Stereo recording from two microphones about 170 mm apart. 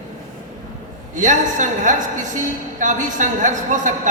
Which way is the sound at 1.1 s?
45° right (ahead or behind).